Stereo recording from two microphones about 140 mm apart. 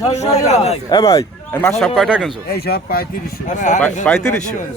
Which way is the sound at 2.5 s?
90° left.